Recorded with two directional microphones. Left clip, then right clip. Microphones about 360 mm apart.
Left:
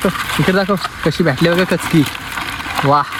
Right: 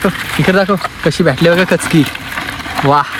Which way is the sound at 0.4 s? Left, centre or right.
Right.